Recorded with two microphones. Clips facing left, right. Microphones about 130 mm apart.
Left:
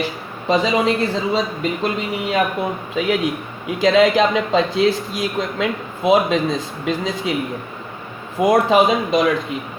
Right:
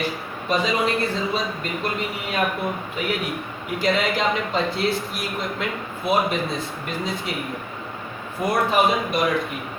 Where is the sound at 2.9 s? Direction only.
90° left.